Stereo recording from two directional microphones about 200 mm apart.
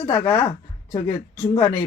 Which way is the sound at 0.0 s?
15° left (ahead or behind).